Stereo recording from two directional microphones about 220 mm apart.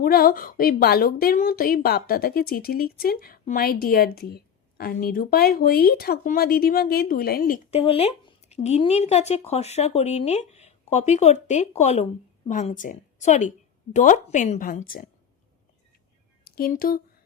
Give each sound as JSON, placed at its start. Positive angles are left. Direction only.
{"t": 0.0, "sound": "a woman's voice", "side_deg": 40}
{"t": 7.7, "sound": "a woman's voice", "side_deg": 25}
{"t": 16.4, "sound": "speech", "side_deg": 40}